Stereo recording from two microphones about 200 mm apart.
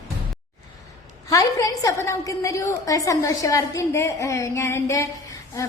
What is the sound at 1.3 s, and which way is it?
A woman's voice, 15° left (ahead or behind).